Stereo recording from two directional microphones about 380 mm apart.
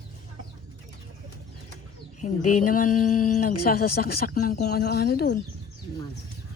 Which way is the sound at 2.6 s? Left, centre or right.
Left.